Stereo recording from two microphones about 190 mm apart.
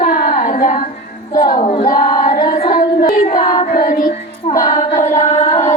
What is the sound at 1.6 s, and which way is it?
Choir, 30° left (ahead or behind).